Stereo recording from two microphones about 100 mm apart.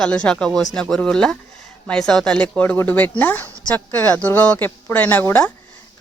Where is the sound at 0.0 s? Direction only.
10° left (ahead or behind).